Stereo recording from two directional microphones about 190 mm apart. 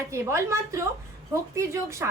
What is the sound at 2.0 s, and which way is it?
Speech, 10° right (ahead or behind).